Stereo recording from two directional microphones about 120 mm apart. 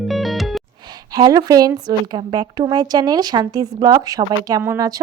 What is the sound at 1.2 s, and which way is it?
A woman's voice, 30° right (ahead or behind).